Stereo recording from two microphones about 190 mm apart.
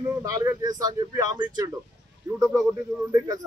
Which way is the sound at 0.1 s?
15° right (ahead or behind).